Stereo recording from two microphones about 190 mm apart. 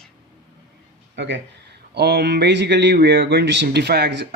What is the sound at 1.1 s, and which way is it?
Speech, 70° right (ahead or behind).